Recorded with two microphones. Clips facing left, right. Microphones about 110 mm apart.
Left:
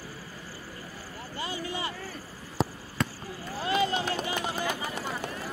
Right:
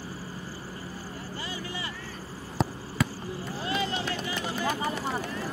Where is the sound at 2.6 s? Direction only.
Centre (ahead or behind).